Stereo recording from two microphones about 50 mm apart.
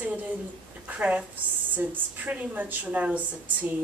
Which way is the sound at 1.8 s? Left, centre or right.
Right.